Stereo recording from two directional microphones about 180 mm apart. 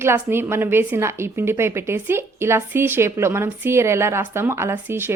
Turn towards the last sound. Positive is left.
turn(degrees=-15)  # may be behind; listen again after turning